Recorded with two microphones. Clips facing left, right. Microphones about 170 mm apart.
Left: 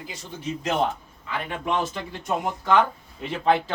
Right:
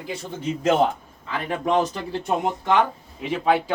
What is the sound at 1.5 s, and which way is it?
Speech, 40° right (ahead or behind).